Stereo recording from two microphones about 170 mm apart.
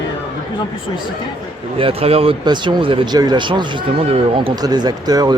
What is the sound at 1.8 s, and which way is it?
Speech, 35° right (ahead or behind).